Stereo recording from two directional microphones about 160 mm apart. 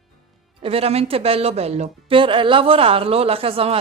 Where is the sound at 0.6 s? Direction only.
35° right (ahead or behind).